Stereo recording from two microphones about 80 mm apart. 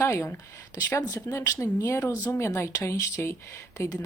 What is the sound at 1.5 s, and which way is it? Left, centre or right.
Speech, left.